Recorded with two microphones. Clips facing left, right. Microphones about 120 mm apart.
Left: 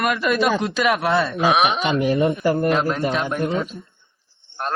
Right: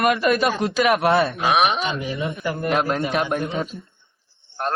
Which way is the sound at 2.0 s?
60° left (ahead or behind).